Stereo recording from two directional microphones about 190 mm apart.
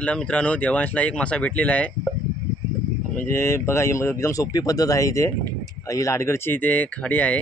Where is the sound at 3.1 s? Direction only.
15° left (ahead or behind).